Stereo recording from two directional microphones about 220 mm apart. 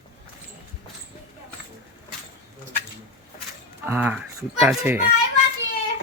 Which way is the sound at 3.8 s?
10° right (ahead or behind).